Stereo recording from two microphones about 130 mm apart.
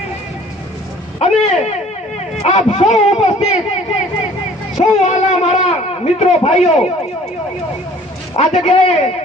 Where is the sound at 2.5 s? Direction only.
60° left (ahead or behind).